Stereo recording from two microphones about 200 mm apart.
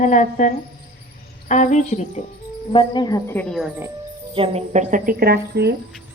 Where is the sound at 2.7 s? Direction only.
25° left (ahead or behind).